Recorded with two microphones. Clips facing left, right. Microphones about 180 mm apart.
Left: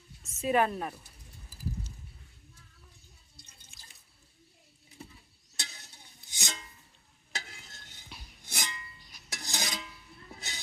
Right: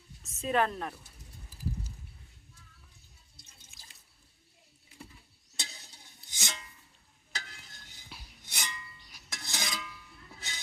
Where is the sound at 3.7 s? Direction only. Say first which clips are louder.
Even; 5° right (ahead or behind).